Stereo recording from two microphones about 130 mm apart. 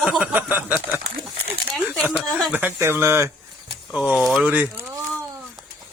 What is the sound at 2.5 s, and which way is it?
Speech, 15° right (ahead or behind).